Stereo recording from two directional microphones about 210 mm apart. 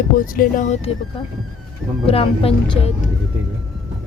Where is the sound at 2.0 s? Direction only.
25° left (ahead or behind).